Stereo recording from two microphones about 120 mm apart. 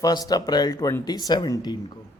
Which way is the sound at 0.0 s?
35° left (ahead or behind).